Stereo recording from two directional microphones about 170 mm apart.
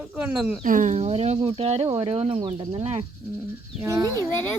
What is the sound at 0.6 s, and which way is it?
Speech, 50° right (ahead or behind).